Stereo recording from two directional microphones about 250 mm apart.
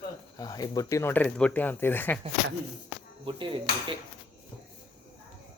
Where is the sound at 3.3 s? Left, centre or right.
Centre.